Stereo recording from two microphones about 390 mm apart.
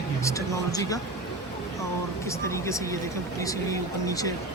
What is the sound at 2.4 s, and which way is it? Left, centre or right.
Speech, centre.